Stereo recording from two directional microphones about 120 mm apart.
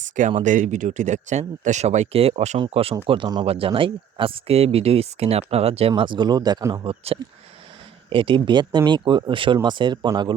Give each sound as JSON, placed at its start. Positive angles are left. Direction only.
{"t": 0.2, "sound": "speech", "side_deg": -85}
{"t": 6.0, "sound": "speech", "side_deg": -40}
{"t": 6.8, "sound": "speech", "side_deg": -55}